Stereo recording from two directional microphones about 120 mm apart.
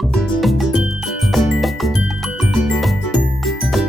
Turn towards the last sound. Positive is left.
turn(degrees=0)  # may be behind; listen again after turning